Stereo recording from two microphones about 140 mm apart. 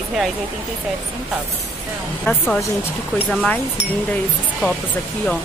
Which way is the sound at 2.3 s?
15° left (ahead or behind).